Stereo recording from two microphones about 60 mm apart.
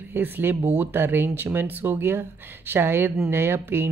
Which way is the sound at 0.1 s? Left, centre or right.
Right.